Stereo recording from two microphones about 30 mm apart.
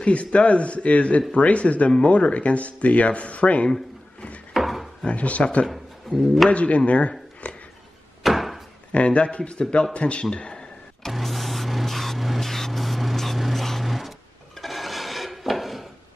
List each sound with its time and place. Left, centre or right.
0.0 s speech: left
4.6 s drawer open or close: centre
5.1 s speech: left
5.7 s speech: centre
6.5 s speech: left
6.9 s speech: left
7.4 s a sound: left
8.2 s door: centre
8.9 s speech: left
10.3 s a sound: left
11.1 s a sound: centre
14.6 s filing: centre